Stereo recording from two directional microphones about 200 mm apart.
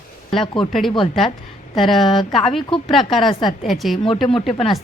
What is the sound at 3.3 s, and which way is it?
Speech, 25° left (ahead or behind).